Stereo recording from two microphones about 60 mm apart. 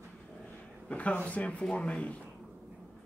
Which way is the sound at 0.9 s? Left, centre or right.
Left.